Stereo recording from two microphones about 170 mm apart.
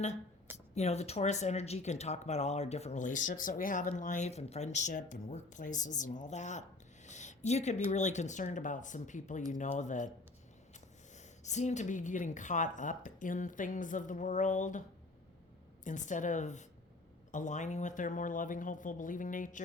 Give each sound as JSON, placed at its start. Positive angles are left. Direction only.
{"t": 0.5, "sound": "speech", "side_deg": 40}
{"t": 11.2, "sound": "speech", "side_deg": 45}